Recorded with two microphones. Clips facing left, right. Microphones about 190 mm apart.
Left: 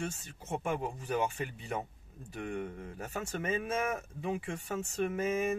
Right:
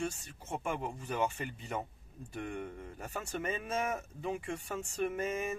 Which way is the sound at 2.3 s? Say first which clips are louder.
Left 2 dB; 5° left (ahead or behind).